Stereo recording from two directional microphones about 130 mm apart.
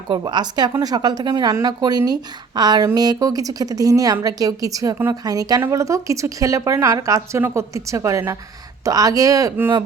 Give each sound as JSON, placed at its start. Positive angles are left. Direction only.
{"t": 0.1, "sound": "a woman's voice", "side_deg": -35}